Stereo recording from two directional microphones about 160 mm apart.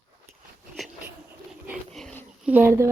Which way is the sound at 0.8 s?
Centre (ahead or behind).